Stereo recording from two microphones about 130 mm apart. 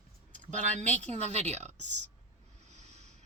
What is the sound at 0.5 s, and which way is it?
Speech, 65° right (ahead or behind).